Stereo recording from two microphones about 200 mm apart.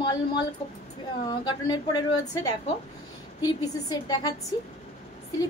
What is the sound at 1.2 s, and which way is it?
Speech, 20° left (ahead or behind).